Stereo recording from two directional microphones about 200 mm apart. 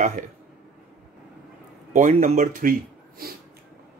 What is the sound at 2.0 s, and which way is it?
Speech, 35° right (ahead or behind).